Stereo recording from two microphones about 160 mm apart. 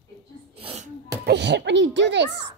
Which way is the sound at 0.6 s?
35° right (ahead or behind).